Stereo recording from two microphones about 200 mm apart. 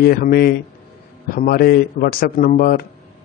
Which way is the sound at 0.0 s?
50° left (ahead or behind).